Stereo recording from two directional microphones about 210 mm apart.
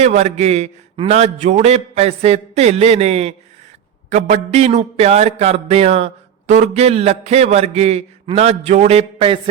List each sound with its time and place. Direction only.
0.0 s a man's voice: 30° right (ahead or behind)